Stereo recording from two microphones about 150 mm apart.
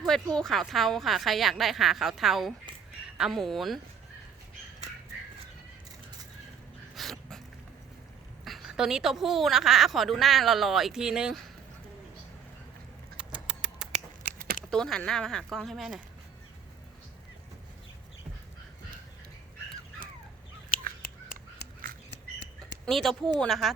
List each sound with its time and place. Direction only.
0.0 s a woman's voice: 5° left (ahead or behind)
6.9 s dog: centre (ahead or behind)
8.4 s a woman's voice: centre (ahead or behind)
13.1 s rodents: 5° right (ahead or behind)
14.3 s a sound: 80° right
14.7 s a woman's voice: 5° left (ahead or behind)
22.9 s a woman's voice: centre (ahead or behind)